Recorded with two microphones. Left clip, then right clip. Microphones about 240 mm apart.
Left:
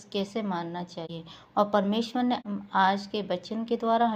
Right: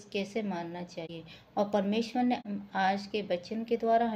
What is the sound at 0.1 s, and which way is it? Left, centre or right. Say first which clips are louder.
A woman's voice: left 3 dB; centre.